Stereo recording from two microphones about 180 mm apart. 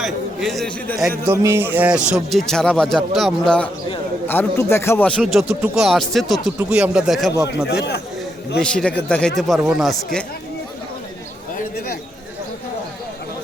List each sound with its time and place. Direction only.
0.0 s a man's voice: centre (ahead or behind)
1.3 s speech: 15° right (ahead or behind)
7.7 s speech: 65° left (ahead or behind)
8.6 s speech: 5° left (ahead or behind)